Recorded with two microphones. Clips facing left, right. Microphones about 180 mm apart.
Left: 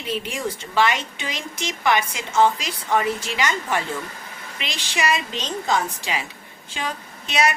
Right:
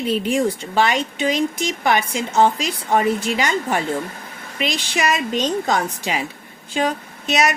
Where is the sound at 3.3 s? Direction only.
35° right (ahead or behind).